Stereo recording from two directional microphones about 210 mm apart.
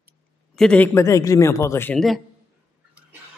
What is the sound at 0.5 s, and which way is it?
A woman's voice, 5° left (ahead or behind).